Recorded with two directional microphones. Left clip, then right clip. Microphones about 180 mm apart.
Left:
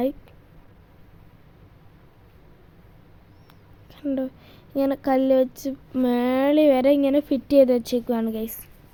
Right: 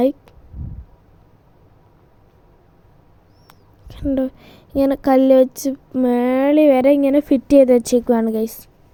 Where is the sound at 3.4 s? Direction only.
40° right (ahead or behind).